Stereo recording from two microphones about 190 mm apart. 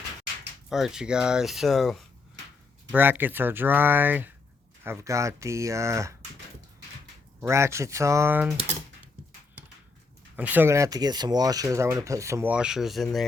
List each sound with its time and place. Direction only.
0.7 s speech: 5° right (ahead or behind)
7.4 s speech: 15° right (ahead or behind)
10.3 s speech: 10° right (ahead or behind)